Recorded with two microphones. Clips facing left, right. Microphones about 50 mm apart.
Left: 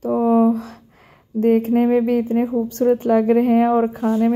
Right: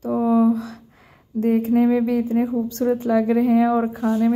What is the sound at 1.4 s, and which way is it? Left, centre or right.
A woman's voice, left.